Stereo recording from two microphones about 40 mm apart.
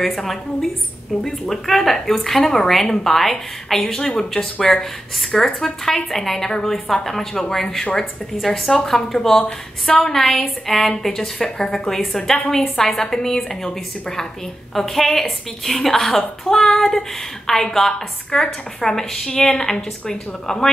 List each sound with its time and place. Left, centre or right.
0.2 s a woman's voice: centre